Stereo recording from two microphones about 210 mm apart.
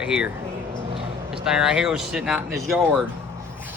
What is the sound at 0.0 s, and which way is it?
Speech, 5° right (ahead or behind).